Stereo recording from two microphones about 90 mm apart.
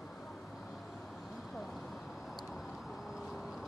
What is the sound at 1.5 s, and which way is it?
Vehicle, 5° left (ahead or behind).